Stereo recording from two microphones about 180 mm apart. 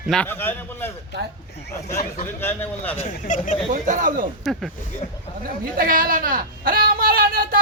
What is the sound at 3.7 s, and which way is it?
Speech, 45° right (ahead or behind).